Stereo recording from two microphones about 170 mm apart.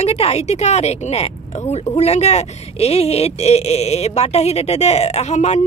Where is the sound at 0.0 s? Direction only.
40° left (ahead or behind).